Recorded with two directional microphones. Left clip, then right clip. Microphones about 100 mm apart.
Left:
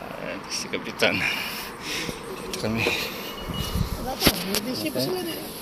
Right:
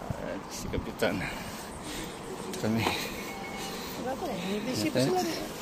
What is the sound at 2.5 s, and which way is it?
Speech, 50° right (ahead or behind).